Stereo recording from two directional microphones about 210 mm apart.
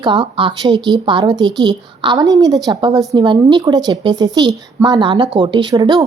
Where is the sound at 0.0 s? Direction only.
20° right (ahead or behind).